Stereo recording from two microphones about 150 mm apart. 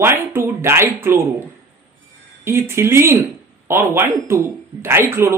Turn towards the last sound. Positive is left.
turn(degrees=-15)  # may be behind; listen again after turning